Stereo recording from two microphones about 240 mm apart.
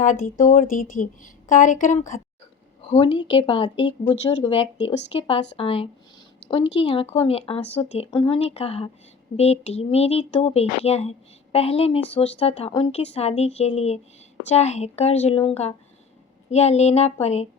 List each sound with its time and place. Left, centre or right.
0.0 s speech: left
16.5 s speech: left